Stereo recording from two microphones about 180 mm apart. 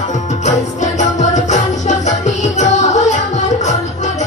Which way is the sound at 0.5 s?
40° left (ahead or behind).